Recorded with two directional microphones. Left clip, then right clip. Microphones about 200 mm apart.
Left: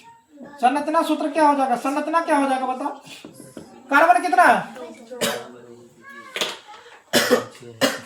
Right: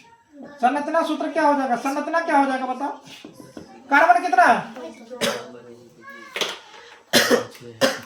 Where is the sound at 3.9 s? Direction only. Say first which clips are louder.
Even; centre (ahead or behind).